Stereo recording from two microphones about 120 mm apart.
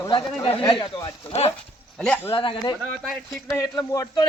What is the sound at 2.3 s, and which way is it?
Speech, 45° left (ahead or behind).